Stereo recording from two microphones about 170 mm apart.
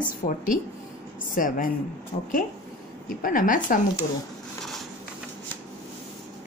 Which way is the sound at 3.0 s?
55° left (ahead or behind).